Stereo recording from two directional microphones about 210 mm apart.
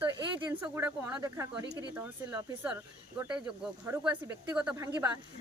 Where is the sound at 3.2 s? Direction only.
5° right (ahead or behind).